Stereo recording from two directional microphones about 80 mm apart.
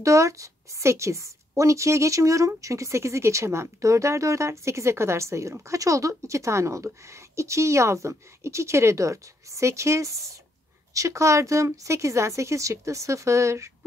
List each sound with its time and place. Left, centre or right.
0.0 s speech: right